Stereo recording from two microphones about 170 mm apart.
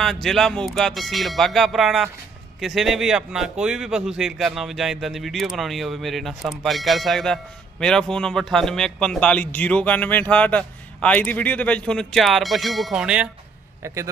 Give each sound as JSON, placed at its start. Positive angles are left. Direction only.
{"t": 0.0, "sound": "speech", "side_deg": 0}
{"t": 13.8, "sound": "a man's voice", "side_deg": -15}